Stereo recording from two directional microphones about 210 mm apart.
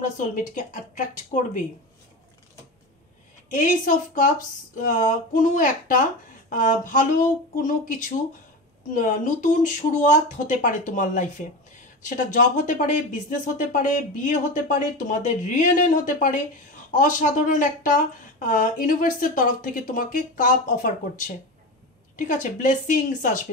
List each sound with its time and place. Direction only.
0.0 s speech: 40° left (ahead or behind)
3.5 s speech: 40° left (ahead or behind)